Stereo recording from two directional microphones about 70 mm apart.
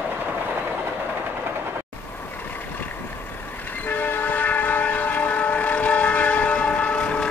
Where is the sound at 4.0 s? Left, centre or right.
Left.